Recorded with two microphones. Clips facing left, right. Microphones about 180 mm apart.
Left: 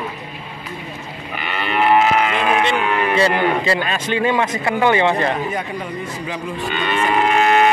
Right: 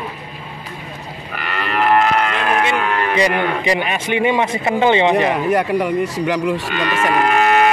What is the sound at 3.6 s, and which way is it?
Speech, 15° right (ahead or behind).